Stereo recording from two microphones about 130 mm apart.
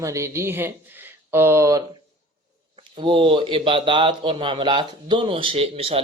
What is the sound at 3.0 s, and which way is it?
Speech, 40° right (ahead or behind).